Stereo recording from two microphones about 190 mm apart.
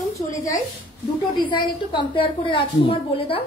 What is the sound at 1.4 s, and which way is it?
A woman's voice, 25° left (ahead or behind).